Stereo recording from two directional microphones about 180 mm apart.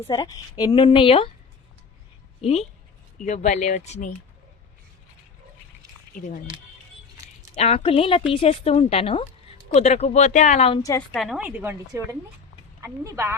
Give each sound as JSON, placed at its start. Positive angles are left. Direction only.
{"t": 0.1, "sound": "a woman's voice", "side_deg": 20}
{"t": 2.4, "sound": "speech", "side_deg": 35}
{"t": 6.1, "sound": "speech", "side_deg": 50}
{"t": 7.5, "sound": "speech", "side_deg": 35}
{"t": 11.1, "sound": "speech", "side_deg": 0}